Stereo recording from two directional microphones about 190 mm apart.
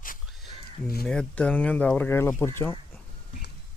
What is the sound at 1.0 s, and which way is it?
Speech, 5° left (ahead or behind).